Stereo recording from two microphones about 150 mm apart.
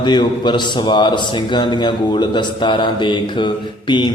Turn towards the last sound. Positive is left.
turn(degrees=30)  # may be behind; listen again after turning